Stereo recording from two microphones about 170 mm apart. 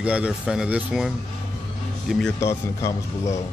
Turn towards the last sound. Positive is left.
turn(degrees=20)  # may be behind; listen again after turning